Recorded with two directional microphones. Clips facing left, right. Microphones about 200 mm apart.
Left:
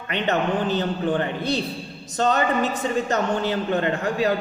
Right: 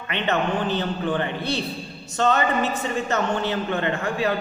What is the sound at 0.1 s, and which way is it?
A man's voice, 40° left (ahead or behind).